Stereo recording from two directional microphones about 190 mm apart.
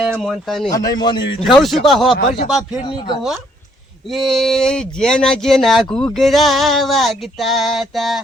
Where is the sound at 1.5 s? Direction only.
Centre (ahead or behind).